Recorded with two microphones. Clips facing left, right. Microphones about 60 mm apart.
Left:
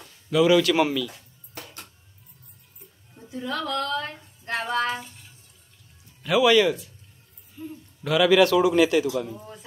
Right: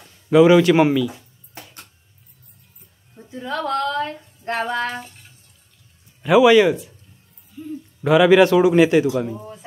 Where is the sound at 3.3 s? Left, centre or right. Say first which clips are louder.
Right 5 dB; right.